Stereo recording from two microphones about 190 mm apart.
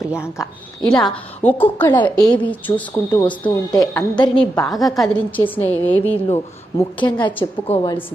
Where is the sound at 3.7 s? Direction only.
20° left (ahead or behind).